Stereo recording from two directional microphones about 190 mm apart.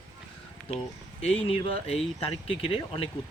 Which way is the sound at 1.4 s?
30° left (ahead or behind).